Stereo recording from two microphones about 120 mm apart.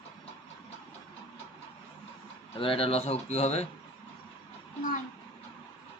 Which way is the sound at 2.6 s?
50° left (ahead or behind).